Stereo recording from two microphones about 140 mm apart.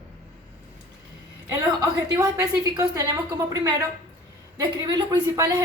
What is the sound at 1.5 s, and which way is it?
A woman's voice, 25° right (ahead or behind).